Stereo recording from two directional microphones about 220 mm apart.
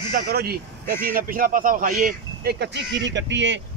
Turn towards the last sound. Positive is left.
turn(degrees=-55)  # may be behind; listen again after turning